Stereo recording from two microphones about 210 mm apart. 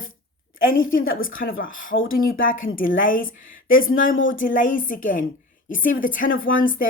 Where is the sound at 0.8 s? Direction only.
70° left (ahead or behind).